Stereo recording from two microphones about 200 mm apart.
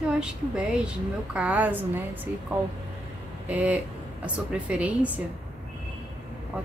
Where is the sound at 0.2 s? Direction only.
5° right (ahead or behind).